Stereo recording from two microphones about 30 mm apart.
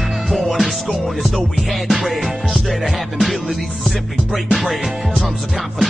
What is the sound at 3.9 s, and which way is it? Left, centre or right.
Music, centre.